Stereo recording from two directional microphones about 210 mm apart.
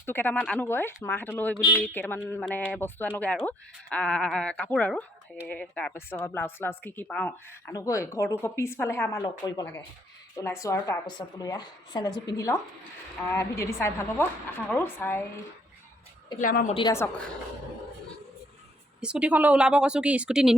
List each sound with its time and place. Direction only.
0.0 s speech: 10° left (ahead or behind)
10.3 s a woman's voice: 15° left (ahead or behind)
16.4 s a woman's voice: 40° left (ahead or behind)
16.7 s speech: 15° left (ahead or behind)
18.9 s speech: 5° right (ahead or behind)